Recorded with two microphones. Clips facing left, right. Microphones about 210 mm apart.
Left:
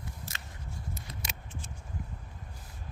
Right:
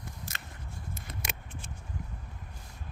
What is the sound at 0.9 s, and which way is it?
Scissors, 55° right (ahead or behind).